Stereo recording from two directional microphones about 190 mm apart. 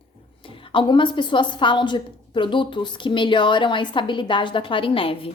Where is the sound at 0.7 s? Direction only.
25° left (ahead or behind).